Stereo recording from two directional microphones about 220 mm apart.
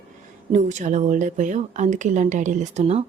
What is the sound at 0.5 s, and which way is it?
A woman's voice, 35° right (ahead or behind).